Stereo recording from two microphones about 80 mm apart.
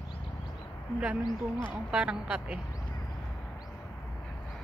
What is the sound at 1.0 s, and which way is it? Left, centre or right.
Speech, centre.